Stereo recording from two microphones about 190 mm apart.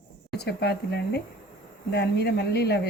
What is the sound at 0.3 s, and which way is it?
Speech, 60° left (ahead or behind).